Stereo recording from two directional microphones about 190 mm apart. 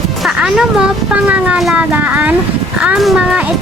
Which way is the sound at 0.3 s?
5° right (ahead or behind).